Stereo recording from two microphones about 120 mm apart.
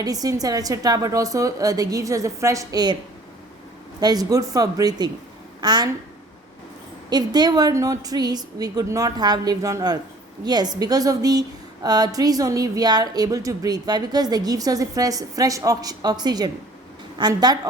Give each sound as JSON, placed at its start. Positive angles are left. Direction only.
{"t": 0.0, "sound": "a woman's voice", "side_deg": -30}
{"t": 4.0, "sound": "a woman's voice", "side_deg": -30}
{"t": 7.1, "sound": "a woman's voice", "side_deg": -35}